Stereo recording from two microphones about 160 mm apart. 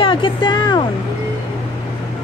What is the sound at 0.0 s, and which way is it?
Music, 30° left (ahead or behind).